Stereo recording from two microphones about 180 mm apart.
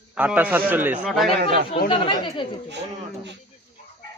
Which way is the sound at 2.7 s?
75° right (ahead or behind).